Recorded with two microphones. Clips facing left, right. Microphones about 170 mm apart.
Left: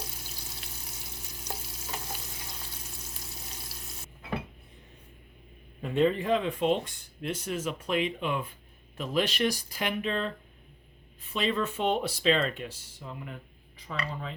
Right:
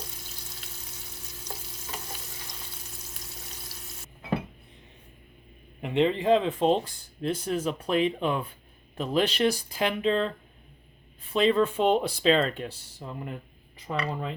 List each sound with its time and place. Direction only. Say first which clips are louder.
5.8 s a man's voice: right 2 dB; 20° right (ahead or behind)
13.8 s speech: right 5 dB; 55° right (ahead or behind)